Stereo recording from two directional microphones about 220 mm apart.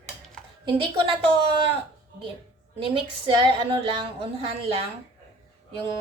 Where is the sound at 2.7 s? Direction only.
25° right (ahead or behind).